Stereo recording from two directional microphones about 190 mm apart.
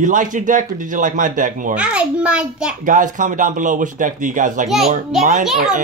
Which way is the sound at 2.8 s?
45° right (ahead or behind).